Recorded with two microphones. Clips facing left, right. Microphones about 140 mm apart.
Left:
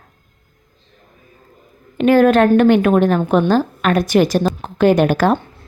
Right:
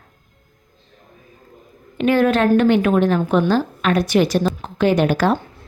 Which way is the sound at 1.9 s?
45° left (ahead or behind).